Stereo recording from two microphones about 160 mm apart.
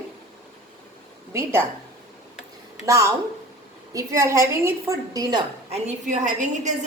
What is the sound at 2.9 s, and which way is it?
A woman's voice, 20° right (ahead or behind).